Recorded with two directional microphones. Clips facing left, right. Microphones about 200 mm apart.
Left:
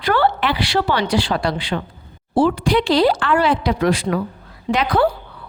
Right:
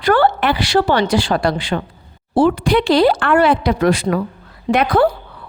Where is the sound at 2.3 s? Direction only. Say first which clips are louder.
Right 2 dB; 60° right (ahead or behind).